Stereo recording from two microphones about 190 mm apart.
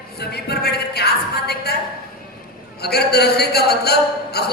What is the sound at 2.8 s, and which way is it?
A man's voice, 60° left (ahead or behind).